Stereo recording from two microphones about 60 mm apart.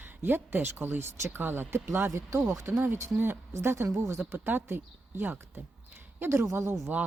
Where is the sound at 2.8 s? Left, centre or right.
Right.